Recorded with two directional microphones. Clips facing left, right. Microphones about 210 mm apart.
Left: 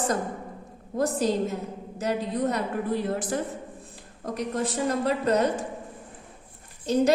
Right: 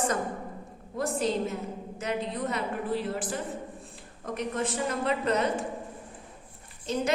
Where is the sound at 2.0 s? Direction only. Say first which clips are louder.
Left 5 dB; 35° left (ahead or behind).